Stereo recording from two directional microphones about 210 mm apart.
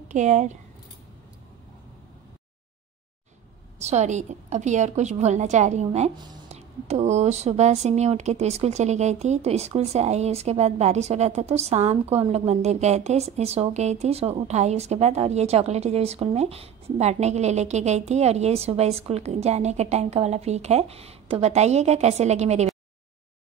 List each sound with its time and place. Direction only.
0.1 s speech: 35° right (ahead or behind)
3.8 s speech: 35° right (ahead or behind)